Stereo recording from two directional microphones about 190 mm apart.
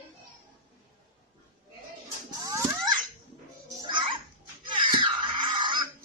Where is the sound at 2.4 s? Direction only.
15° right (ahead or behind).